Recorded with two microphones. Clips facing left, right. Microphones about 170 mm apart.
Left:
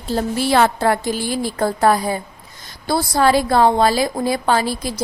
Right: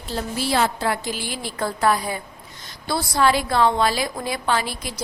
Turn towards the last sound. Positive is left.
turn(degrees=40)  # may be behind; listen again after turning